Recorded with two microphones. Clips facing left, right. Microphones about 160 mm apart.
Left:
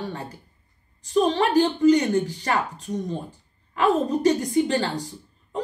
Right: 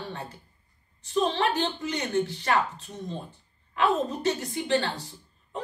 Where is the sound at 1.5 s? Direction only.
35° left (ahead or behind).